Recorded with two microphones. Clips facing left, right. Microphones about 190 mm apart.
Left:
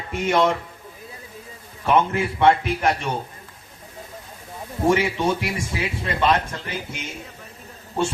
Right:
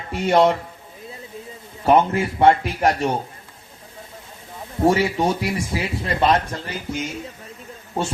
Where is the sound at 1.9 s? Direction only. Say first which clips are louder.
Right 3 dB; 35° right (ahead or behind).